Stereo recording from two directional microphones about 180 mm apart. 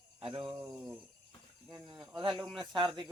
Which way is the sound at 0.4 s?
5° right (ahead or behind).